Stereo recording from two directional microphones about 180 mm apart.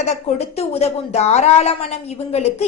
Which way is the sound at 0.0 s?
35° left (ahead or behind).